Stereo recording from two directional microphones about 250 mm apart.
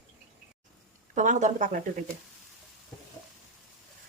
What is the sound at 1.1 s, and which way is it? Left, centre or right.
Speech, right.